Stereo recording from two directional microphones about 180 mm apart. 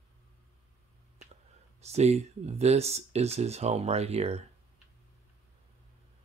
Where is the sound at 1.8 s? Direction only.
35° right (ahead or behind).